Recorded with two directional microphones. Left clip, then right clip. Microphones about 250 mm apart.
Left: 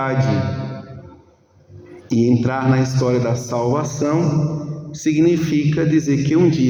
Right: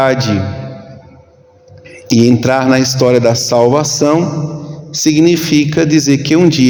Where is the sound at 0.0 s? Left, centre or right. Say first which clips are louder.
Right 10 dB; right.